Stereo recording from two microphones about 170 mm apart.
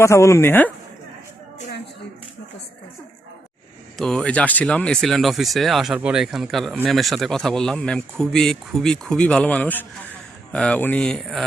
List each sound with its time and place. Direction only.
0.0 s speech: 15° left (ahead or behind)
3.9 s speech: 5° left (ahead or behind)